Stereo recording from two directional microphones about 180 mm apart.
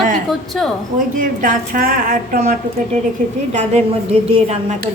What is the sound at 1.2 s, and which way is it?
A woman's voice, 45° right (ahead or behind).